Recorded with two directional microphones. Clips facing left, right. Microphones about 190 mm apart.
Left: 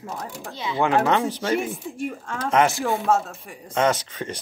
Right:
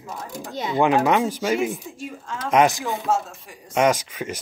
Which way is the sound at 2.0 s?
55° left (ahead or behind).